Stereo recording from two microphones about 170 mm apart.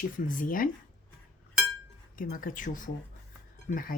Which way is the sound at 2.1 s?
55° left (ahead or behind).